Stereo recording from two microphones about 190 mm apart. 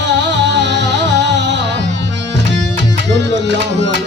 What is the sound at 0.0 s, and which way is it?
Music, 70° right (ahead or behind).